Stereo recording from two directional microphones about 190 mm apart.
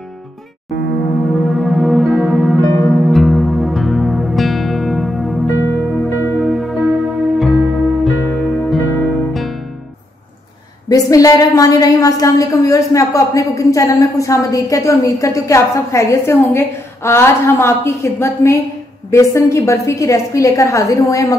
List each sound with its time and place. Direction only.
1.4 s music: centre (ahead or behind)
10.9 s a woman's voice: 20° left (ahead or behind)